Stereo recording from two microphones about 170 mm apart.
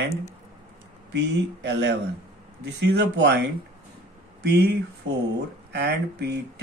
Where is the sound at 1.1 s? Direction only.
90° right.